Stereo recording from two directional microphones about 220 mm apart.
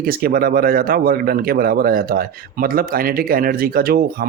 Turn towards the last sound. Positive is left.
turn(degrees=-40)  # may be behind; listen again after turning